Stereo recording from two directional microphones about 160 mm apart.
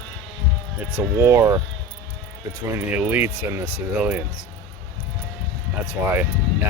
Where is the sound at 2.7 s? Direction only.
10° right (ahead or behind).